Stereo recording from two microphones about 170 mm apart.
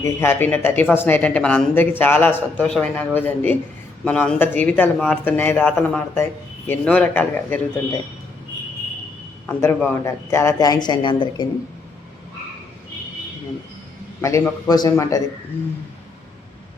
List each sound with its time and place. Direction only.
0.0 s speech: 15° left (ahead or behind)
9.5 s a man's voice: 15° left (ahead or behind); by 11.4 s 30° left (ahead or behind)
14.2 s a man's voice: 15° left (ahead or behind)